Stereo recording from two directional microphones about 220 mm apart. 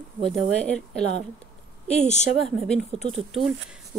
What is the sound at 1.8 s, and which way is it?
Speech, 30° left (ahead or behind).